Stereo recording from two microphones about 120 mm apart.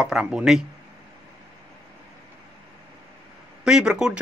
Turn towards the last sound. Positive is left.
turn(degrees=-5)  # may be behind; listen again after turning